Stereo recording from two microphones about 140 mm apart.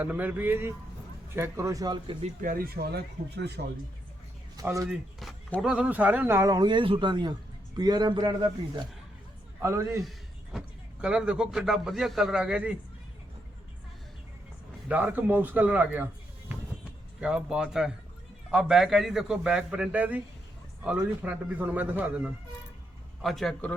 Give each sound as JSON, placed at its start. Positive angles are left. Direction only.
{"t": 0.0, "sound": "a man's voice", "side_deg": -10}
{"t": 2.4, "sound": "speech", "side_deg": -85}
{"t": 4.5, "sound": "a man's voice", "side_deg": -25}
{"t": 5.2, "sound": "a man's voice", "side_deg": 0}
{"t": 9.6, "sound": "a man's voice", "side_deg": -20}
{"t": 10.0, "sound": "a sound", "side_deg": 0}
{"t": 11.0, "sound": "a man's voice", "side_deg": -5}
{"t": 14.8, "sound": "a man's voice", "side_deg": -10}
{"t": 17.2, "sound": "a man's voice", "side_deg": -5}
{"t": 23.2, "sound": "a man's voice", "side_deg": 0}